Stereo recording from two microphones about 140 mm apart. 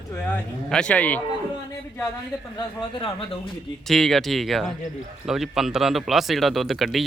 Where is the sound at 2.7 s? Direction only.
40° left (ahead or behind).